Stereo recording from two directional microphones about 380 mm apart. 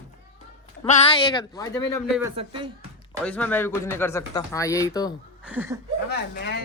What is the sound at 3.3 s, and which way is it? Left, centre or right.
A woman's voice, centre.